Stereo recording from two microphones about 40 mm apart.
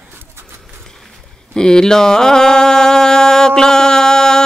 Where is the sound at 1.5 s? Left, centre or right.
Centre.